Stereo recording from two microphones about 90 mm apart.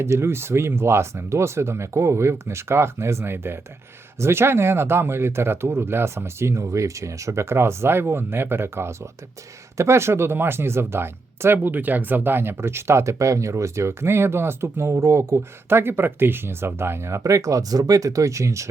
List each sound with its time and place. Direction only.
0.0 s speech: 30° right (ahead or behind)